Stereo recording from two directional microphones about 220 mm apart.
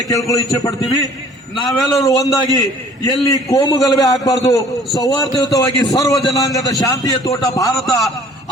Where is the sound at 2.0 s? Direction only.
15° left (ahead or behind).